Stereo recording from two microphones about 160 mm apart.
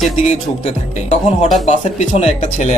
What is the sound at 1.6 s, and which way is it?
Speech, 45° left (ahead or behind).